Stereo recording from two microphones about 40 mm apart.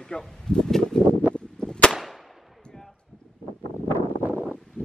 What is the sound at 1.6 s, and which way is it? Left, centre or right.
Firecracker, left.